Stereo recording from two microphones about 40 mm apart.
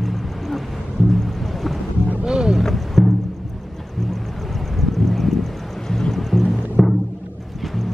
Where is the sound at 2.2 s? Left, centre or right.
Right.